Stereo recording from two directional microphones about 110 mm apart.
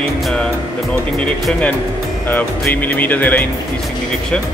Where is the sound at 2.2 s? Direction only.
15° left (ahead or behind).